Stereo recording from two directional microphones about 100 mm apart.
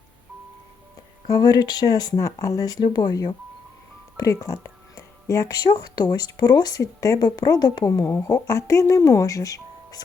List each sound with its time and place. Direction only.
1.3 s speech: 40° left (ahead or behind)